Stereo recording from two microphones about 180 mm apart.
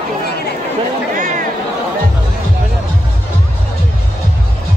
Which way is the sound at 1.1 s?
50° right (ahead or behind).